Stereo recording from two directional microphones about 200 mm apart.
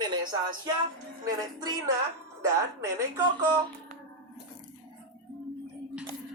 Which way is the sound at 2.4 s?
15° right (ahead or behind).